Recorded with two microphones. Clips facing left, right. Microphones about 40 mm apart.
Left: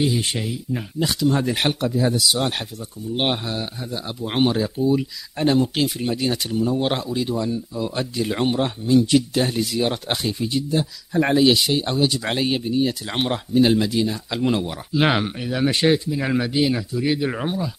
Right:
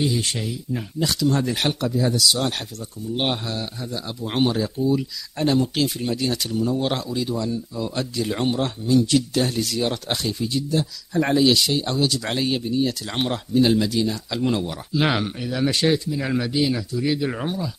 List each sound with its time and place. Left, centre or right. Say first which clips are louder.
0.0 s speech: left 2 dB; left